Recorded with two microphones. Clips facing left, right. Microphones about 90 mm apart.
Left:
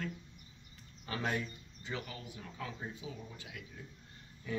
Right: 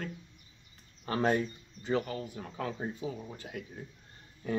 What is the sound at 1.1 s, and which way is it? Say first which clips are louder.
Speech: right 8 dB; 40° right (ahead or behind).